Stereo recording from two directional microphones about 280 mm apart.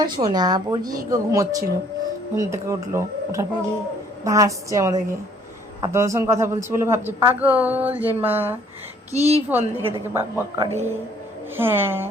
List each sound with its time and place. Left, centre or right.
0.0 s a man's voice: centre
9.1 s a woman's voice: right
9.5 s a man's voice: centre